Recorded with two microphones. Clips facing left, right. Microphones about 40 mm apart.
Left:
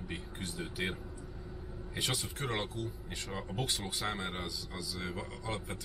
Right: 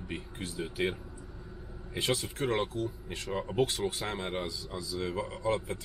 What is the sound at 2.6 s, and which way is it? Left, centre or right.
Speech, centre.